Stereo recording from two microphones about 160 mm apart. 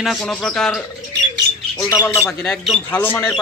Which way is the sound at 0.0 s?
Centre (ahead or behind).